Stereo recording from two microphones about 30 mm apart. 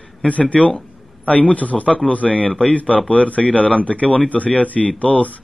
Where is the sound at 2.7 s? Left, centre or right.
Left.